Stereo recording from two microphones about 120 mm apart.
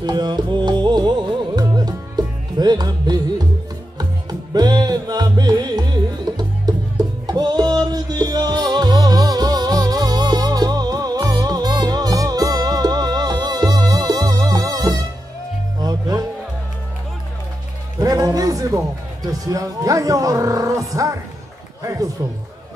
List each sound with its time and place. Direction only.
0.0 s music: 35° right (ahead or behind)
17.9 s music: 30° right (ahead or behind)
19.4 s speech: 30° right (ahead or behind)